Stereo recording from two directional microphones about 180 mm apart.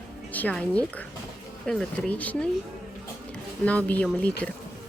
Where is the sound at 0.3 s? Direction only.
10° left (ahead or behind).